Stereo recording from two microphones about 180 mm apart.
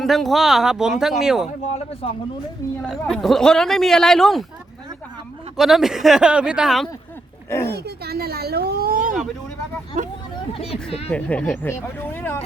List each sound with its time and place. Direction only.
0.0 s speech: centre (ahead or behind)
2.8 s speech: centre (ahead or behind)
5.5 s speech: centre (ahead or behind)
7.7 s speech: 65° right (ahead or behind); by 10.1 s 40° right (ahead or behind)
10.5 s speech: 35° left (ahead or behind)
11.1 s speech: 5° left (ahead or behind)